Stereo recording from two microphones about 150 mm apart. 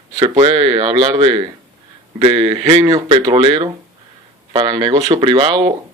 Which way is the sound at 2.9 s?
25° right (ahead or behind).